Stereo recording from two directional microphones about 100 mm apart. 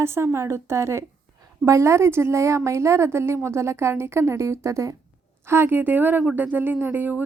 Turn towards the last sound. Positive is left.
turn(degrees=-20)  # may be behind; listen again after turning